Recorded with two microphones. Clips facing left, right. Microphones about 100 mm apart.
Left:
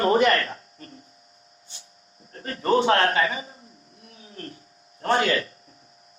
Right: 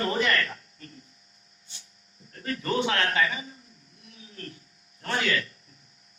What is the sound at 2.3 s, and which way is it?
A man's voice, 35° left (ahead or behind).